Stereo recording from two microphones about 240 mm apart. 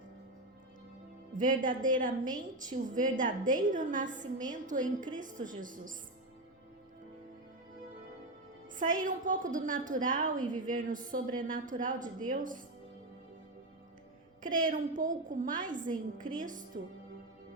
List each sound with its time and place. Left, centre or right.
1.4 s a woman's voice: right
8.8 s a woman's voice: right
14.4 s a woman's voice: right